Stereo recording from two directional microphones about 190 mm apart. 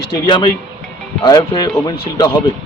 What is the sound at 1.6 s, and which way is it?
Speech, 20° left (ahead or behind).